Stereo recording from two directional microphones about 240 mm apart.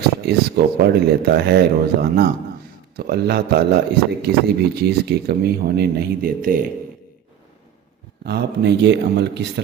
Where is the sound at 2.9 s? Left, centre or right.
Right.